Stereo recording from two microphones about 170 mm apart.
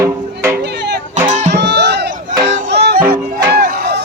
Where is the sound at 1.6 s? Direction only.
85° right.